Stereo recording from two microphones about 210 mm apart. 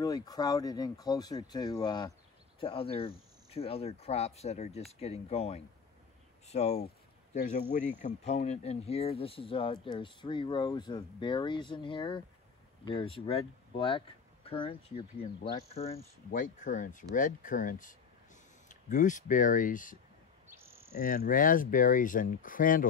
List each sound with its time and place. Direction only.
0.0 s speech: 20° left (ahead or behind)
16.3 s speech: 40° left (ahead or behind)
20.4 s insect: 10° right (ahead or behind)
21.0 s speech: 40° left (ahead or behind)